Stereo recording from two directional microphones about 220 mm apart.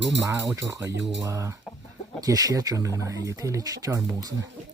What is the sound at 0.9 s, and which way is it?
Speech, 55° right (ahead or behind).